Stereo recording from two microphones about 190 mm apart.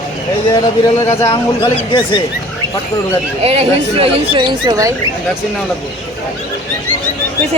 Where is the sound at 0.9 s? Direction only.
30° left (ahead or behind).